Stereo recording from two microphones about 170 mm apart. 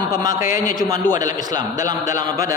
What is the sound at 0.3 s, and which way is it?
Speech, 50° left (ahead or behind).